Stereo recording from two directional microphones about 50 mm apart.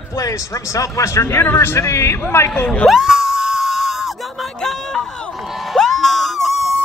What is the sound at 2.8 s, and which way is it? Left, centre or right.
Screaming, centre.